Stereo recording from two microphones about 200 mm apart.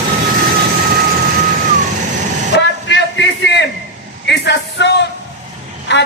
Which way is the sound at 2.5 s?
65° left (ahead or behind).